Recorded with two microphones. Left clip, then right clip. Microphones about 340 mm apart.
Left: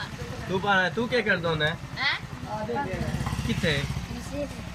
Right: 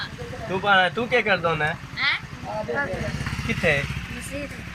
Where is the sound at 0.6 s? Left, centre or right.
Centre.